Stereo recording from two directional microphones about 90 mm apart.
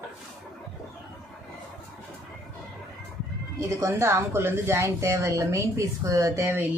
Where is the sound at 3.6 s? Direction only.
35° right (ahead or behind).